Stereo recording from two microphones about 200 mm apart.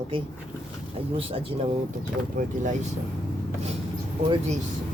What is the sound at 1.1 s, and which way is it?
Speech, 30° right (ahead or behind).